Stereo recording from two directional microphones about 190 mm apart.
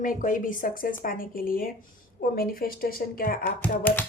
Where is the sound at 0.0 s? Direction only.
45° left (ahead or behind).